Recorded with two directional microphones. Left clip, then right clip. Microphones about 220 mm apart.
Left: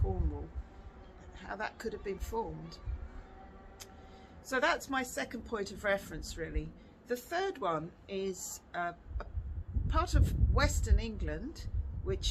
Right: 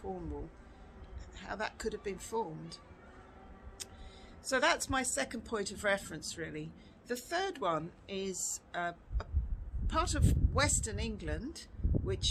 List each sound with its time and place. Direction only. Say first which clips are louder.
1.4 s a woman's voice: even; 15° right (ahead or behind)
4.4 s a woman's voice: right 1 dB; 15° right (ahead or behind)